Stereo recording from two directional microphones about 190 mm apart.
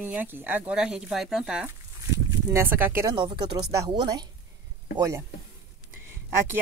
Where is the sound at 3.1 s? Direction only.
25° right (ahead or behind).